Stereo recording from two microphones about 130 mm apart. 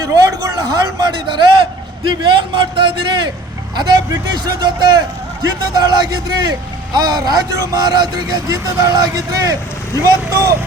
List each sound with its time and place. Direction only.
0.0 s a man's voice: 25° right (ahead or behind)